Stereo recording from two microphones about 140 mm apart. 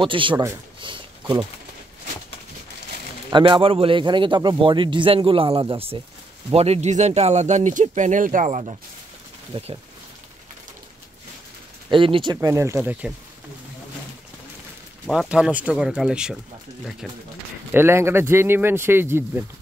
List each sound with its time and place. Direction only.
0.0 s a man's voice: 35° right (ahead or behind)
0.7 s a sound: 35° right (ahead or behind)
3.3 s a man's voice: 35° right (ahead or behind)
11.9 s a man's voice: 35° right (ahead or behind)
12.4 s speech: 20° right (ahead or behind)
15.0 s speech: 5° right (ahead or behind)
17.7 s speech: 15° right (ahead or behind)